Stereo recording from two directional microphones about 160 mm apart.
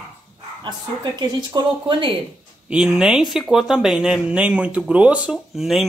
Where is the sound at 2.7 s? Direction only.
5° right (ahead or behind).